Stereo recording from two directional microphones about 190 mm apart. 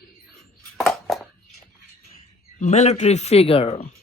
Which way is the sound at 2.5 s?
35° left (ahead or behind).